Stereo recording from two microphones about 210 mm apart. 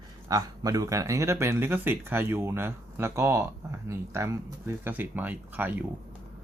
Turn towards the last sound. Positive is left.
turn(degrees=-10)  # may be behind; listen again after turning